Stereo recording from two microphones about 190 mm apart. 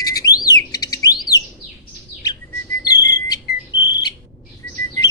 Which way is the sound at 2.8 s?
20° left (ahead or behind).